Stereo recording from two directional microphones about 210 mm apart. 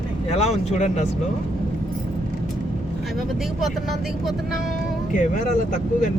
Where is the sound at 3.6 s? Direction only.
Centre (ahead or behind).